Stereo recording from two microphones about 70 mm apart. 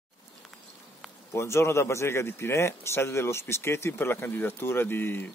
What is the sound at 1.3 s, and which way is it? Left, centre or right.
A man's voice, left.